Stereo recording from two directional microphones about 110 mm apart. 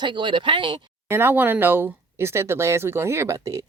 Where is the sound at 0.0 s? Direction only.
45° right (ahead or behind).